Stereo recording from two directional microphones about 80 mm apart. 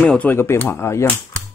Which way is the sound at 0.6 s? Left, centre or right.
Left.